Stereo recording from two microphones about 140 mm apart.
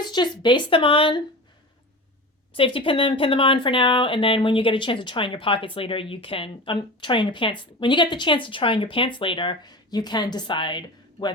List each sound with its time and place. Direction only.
0.0 s speech: 30° left (ahead or behind)
2.6 s speech: 40° left (ahead or behind)